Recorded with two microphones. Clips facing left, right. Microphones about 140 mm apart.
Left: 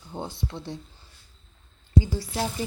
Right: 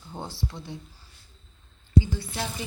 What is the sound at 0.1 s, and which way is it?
Speech, 15° left (ahead or behind).